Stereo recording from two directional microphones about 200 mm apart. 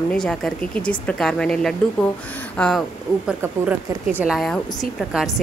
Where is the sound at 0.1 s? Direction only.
5° left (ahead or behind).